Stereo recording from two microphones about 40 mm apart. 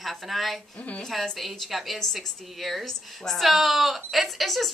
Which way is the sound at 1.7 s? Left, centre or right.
Centre.